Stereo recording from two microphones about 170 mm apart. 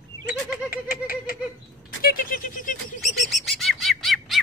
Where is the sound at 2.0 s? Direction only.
55° left (ahead or behind).